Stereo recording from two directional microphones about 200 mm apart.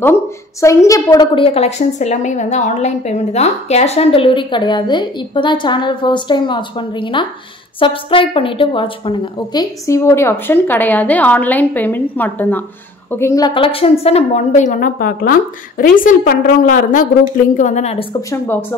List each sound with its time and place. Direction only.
0.0 s a woman's voice: 15° left (ahead or behind); by 18.0 s 35° left (ahead or behind)
18.3 s a woman's voice: 10° left (ahead or behind)